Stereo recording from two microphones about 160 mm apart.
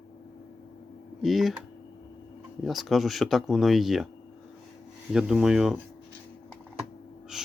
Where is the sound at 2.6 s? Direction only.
Centre (ahead or behind).